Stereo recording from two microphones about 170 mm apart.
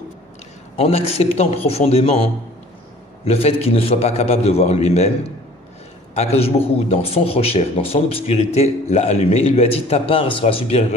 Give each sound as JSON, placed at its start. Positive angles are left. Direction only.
{"t": 0.7, "sound": "a man's voice", "side_deg": 35}